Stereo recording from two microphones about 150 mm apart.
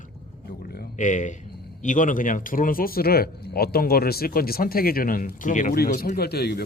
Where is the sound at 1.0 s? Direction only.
55° left (ahead or behind).